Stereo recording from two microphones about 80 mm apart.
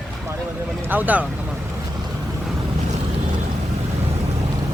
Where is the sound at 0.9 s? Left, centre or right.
Right.